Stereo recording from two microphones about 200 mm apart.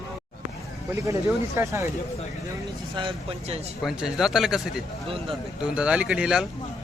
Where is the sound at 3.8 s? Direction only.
Centre (ahead or behind).